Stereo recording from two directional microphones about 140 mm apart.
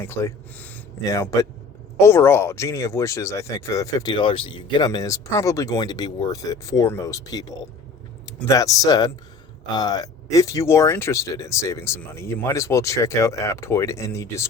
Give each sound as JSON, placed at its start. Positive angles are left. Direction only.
{"t": 0.0, "sound": "speech", "side_deg": 20}
{"t": 1.1, "sound": "speech", "side_deg": 25}
{"t": 4.0, "sound": "speech", "side_deg": 35}
{"t": 8.4, "sound": "speech", "side_deg": 25}